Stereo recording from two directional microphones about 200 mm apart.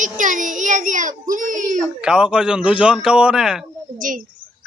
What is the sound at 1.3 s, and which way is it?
Whimper, 40° right (ahead or behind).